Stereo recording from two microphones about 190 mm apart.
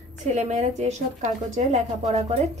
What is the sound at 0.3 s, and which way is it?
Speech, 40° right (ahead or behind).